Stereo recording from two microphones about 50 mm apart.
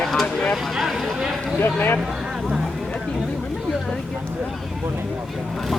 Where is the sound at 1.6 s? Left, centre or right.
Left.